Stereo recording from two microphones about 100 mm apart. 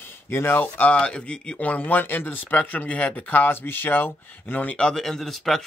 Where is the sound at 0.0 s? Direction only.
20° left (ahead or behind).